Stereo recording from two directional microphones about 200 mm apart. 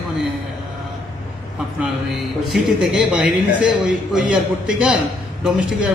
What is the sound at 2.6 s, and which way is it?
A man's voice, 5° right (ahead or behind).